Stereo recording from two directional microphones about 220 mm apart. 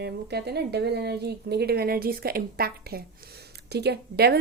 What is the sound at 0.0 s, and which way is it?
Speech, 45° right (ahead or behind).